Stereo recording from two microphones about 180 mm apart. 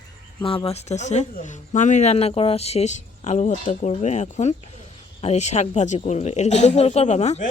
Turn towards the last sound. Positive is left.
turn(degrees=40)  # may be behind; listen again after turning